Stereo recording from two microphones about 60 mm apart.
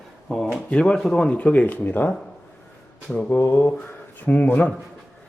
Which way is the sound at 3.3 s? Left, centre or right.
Left.